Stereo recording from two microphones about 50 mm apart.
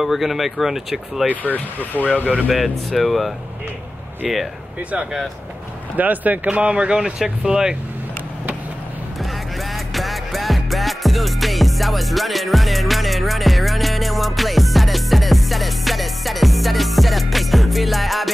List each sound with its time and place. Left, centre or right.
0.0 s speech: centre
1.4 s speech: left
2.2 s speech: right
2.9 s speech: centre
5.9 s speech: right; by 7.7 s centre
9.2 s music: centre